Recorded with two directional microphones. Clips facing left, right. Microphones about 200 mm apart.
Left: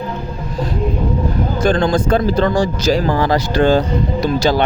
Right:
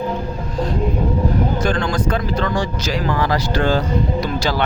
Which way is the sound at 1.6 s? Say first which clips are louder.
Left 5 dB; 30° left (ahead or behind).